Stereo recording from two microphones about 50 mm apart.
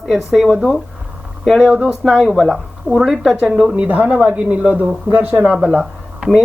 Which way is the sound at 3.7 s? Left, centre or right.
Right.